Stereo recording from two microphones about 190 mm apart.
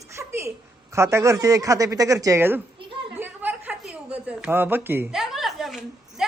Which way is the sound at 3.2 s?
10° right (ahead or behind).